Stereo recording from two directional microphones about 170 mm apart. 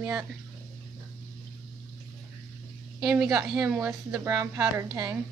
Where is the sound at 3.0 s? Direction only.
5° right (ahead or behind).